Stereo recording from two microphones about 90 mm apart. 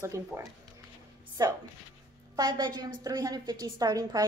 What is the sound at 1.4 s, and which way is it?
A woman's voice, 45° right (ahead or behind).